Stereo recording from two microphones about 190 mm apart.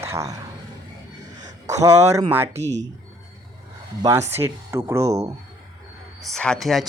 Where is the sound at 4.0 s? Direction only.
15° right (ahead or behind).